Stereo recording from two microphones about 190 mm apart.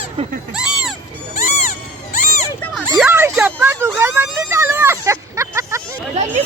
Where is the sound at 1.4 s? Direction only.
40° left (ahead or behind).